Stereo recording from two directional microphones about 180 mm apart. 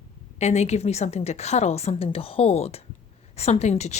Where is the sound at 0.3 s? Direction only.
40° left (ahead or behind).